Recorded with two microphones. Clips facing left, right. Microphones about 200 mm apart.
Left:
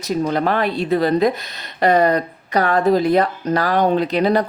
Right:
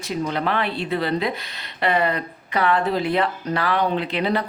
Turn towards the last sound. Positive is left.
turn(degrees=40)  # may be behind; listen again after turning